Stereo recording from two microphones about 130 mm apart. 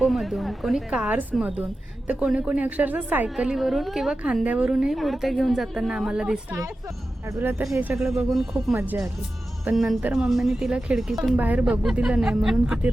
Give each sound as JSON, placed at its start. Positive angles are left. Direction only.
{"t": 0.0, "sound": "a woman's voice", "side_deg": 0}
{"t": 7.3, "sound": "speech", "side_deg": -20}
{"t": 7.9, "sound": "a woman's voice", "side_deg": 0}
{"t": 9.7, "sound": "a woman's voice", "side_deg": 0}